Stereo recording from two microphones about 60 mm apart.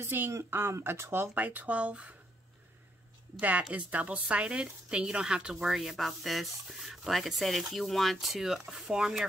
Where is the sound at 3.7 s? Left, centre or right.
Right.